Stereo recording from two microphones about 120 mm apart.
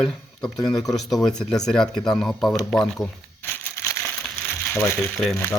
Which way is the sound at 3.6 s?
20° left (ahead or behind).